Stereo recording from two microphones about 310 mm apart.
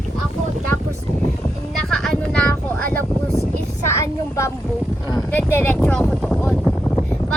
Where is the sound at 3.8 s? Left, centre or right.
Centre.